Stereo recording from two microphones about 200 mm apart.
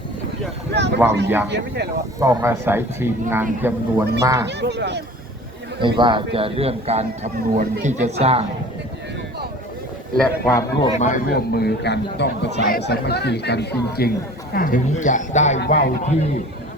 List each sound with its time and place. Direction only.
0.7 s speech: 60° right (ahead or behind)
2.1 s speech: 15° right (ahead or behind)
4.4 s speech: 60° right (ahead or behind)
5.8 s a man's voice: 25° right (ahead or behind)
10.2 s a man's voice: 10° left (ahead or behind)
10.9 s speech: 40° left (ahead or behind)